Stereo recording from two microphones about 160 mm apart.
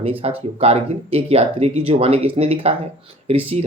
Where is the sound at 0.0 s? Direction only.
35° right (ahead or behind).